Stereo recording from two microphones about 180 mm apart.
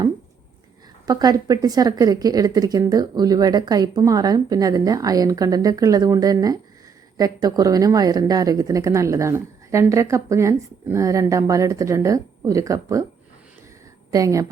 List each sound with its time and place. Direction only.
1.0 s a woman's voice: 20° right (ahead or behind)
14.1 s a woman's voice: 20° right (ahead or behind)